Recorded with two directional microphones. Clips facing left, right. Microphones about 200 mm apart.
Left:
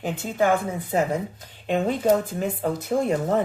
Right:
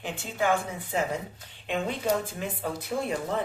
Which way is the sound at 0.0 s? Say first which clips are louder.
Left 6 dB; 40° left (ahead or behind).